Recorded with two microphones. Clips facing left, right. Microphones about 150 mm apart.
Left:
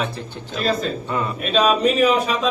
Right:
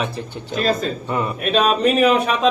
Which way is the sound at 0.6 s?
50° right (ahead or behind).